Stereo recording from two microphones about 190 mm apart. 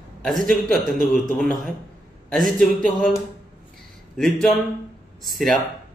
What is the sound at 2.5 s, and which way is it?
Speech, 5° left (ahead or behind).